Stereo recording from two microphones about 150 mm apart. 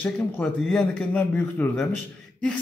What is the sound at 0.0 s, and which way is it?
Speech, 5° left (ahead or behind).